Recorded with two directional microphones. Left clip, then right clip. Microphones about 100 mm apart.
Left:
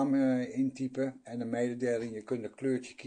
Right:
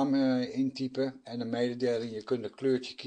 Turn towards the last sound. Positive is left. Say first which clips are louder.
# right 4 dB
turn(degrees=-30)  # may be behind; listen again after turning